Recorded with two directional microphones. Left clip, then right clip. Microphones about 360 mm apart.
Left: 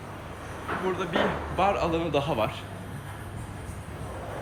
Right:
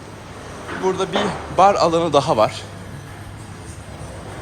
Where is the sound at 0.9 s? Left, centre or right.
Centre.